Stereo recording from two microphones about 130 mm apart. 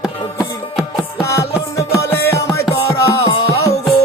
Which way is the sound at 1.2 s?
20° left (ahead or behind).